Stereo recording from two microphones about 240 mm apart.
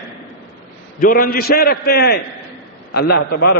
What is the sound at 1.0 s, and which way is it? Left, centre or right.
A man's voice, left.